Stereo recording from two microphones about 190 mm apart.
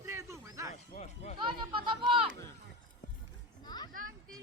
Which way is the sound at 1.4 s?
25° right (ahead or behind).